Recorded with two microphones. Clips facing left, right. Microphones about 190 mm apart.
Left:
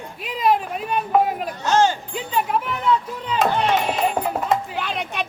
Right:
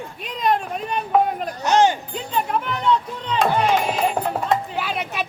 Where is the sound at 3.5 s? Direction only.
Centre (ahead or behind).